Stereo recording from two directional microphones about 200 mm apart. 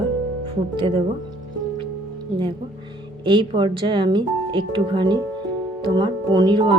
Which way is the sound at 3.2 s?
25° right (ahead or behind).